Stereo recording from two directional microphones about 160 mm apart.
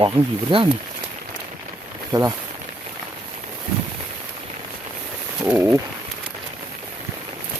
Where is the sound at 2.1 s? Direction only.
20° right (ahead or behind).